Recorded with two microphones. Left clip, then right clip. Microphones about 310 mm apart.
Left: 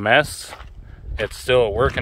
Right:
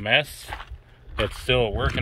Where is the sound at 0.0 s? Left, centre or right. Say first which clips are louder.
Left 5 dB; centre.